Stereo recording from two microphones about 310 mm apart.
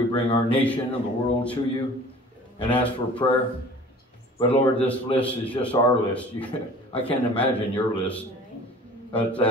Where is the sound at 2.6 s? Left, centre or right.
Centre.